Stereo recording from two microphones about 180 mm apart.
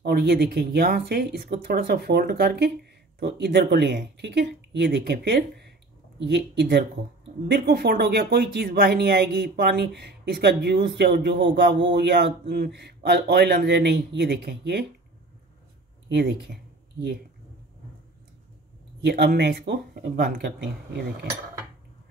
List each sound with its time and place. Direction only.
0.0 s a man's voice: 60° right (ahead or behind)
16.1 s a man's voice: 70° right (ahead or behind)
18.9 s speech: 70° right (ahead or behind)